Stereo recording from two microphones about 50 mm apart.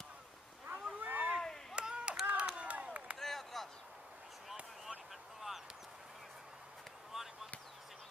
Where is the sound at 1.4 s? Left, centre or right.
Centre.